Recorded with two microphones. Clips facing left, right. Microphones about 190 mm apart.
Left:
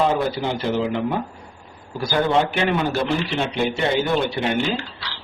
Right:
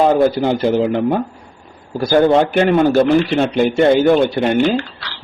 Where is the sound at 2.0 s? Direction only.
50° right (ahead or behind).